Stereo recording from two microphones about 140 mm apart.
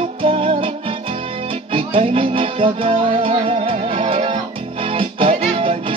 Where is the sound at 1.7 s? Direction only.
40° right (ahead or behind).